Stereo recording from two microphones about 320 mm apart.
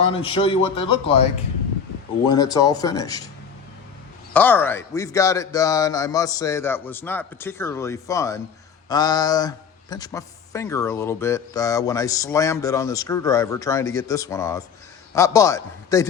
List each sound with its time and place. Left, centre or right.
0.0 s speech: centre
2.3 s speech: centre
4.4 s speech: centre